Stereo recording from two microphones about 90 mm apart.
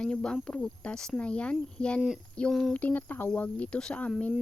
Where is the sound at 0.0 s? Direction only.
10° left (ahead or behind).